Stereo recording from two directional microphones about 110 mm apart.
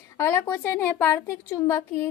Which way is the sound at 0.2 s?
25° left (ahead or behind).